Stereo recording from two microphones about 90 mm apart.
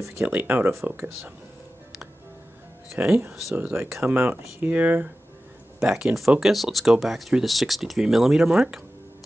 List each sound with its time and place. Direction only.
0.2 s speech: 15° right (ahead or behind)
3.0 s speech: 20° right (ahead or behind)
5.8 s speech: 5° right (ahead or behind)